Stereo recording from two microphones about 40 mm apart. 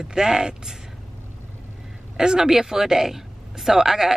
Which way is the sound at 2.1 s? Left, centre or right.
Centre.